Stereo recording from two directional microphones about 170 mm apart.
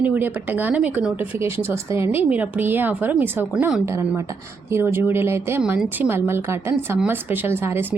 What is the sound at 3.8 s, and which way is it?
A woman's voice, 15° right (ahead or behind).